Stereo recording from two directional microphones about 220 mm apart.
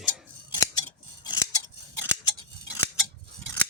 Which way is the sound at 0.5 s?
15° left (ahead or behind).